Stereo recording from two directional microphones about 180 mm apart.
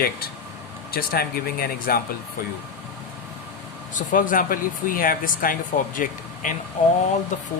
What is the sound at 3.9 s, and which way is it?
Speech, 45° left (ahead or behind).